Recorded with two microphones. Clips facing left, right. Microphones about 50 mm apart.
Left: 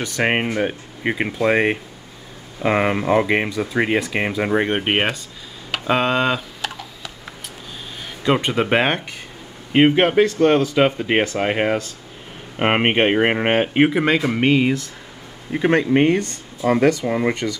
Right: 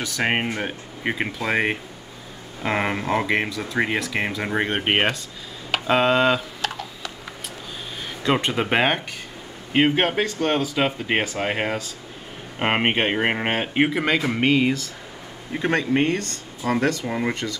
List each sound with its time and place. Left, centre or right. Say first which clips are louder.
0.0 s speech: left 3 dB; centre
5.7 s a sound: even; centre
8.2 s speech: left 3 dB; centre
9.8 s speech: left 5 dB; centre